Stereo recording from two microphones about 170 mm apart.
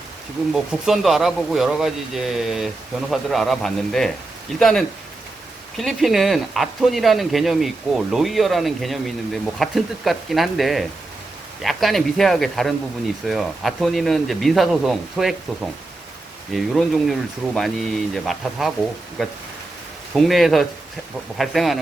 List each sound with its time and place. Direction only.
0.5 s speech: centre (ahead or behind)
16.5 s speech: centre (ahead or behind)
20.1 s speech: centre (ahead or behind)